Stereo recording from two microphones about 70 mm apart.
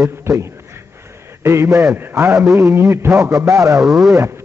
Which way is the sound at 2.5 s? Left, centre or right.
Right.